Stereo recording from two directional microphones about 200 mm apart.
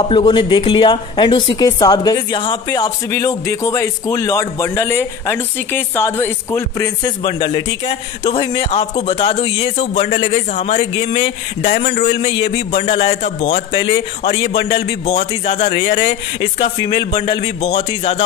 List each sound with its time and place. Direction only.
0.1 s a woman's voice: 25° left (ahead or behind)
7.2 s speech: 25° left (ahead or behind)
11.7 s a man's voice: 40° left (ahead or behind)